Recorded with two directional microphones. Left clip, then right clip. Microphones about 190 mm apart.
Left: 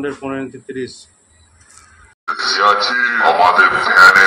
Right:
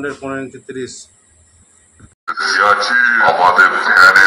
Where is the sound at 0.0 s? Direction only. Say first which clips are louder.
Even; centre (ahead or behind).